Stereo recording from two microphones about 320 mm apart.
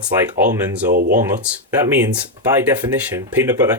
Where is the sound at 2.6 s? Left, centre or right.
Centre.